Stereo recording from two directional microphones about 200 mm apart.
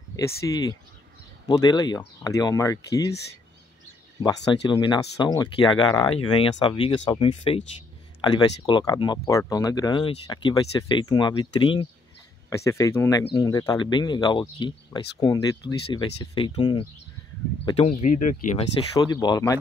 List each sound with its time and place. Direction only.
0.1 s speech: 15° left (ahead or behind)
4.5 s speech: 20° left (ahead or behind)
18.9 s speech: 20° left (ahead or behind)